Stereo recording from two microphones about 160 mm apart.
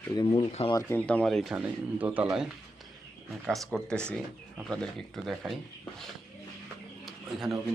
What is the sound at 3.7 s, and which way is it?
Speech, centre (ahead or behind).